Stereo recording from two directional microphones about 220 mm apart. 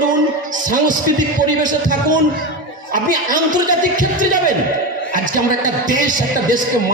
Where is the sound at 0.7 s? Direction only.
35° right (ahead or behind).